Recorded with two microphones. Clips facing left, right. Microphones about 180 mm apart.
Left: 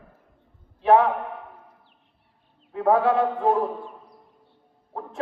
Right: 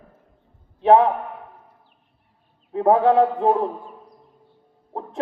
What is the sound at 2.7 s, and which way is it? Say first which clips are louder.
Speech: right 4 dB; 30° right (ahead or behind).